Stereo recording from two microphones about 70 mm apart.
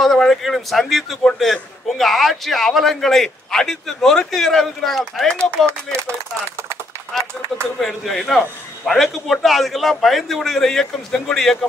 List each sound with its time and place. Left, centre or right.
0.0 s a man's voice: centre
5.7 s speech: right
7.1 s run: centre
7.8 s a man's voice: centre